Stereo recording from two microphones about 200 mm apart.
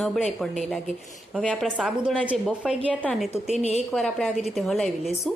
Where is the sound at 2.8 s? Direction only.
5° left (ahead or behind).